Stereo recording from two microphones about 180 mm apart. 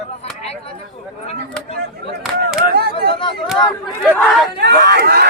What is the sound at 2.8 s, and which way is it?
Speech, 65° right (ahead or behind).